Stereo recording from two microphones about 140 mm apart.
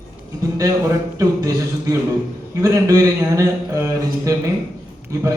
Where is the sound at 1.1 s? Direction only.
25° right (ahead or behind).